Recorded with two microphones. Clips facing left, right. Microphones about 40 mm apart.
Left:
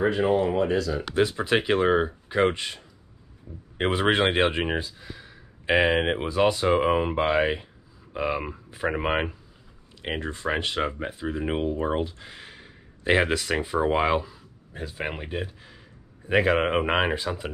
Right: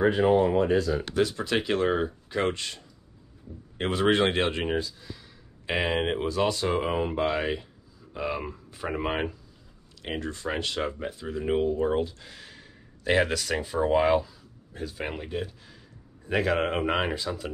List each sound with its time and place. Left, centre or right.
0.7 s speech: right
1.1 s speech: left